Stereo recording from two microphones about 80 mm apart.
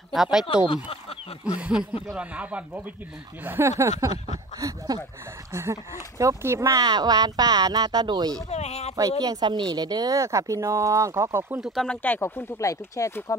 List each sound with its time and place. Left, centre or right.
0.1 s speech: centre
3.4 s speech: right
5.5 s speech: right
6.8 s speech: right
11.6 s speech: centre
11.9 s speech: left
12.2 s speech: left